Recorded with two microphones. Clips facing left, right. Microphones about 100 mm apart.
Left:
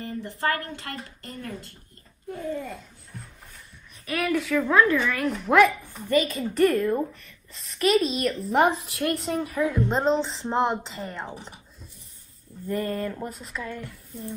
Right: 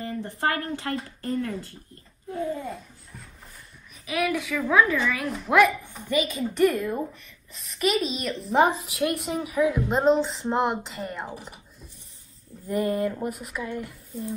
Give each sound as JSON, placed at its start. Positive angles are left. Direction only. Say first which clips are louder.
{"t": 0.0, "sound": "a woman's voice", "louder": "right 1 dB", "side_deg": -25}
{"t": 4.0, "sound": "a woman's voice", "louder": "even", "side_deg": -5}
{"t": 12.6, "sound": "a woman's voice", "louder": "right 3 dB", "side_deg": -20}